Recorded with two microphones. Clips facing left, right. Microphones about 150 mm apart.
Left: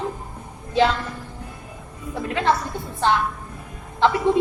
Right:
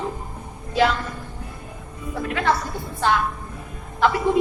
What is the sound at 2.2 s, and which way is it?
Speech, 20° left (ahead or behind).